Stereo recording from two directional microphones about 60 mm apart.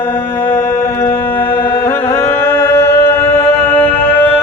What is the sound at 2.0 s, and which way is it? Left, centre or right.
Music, left.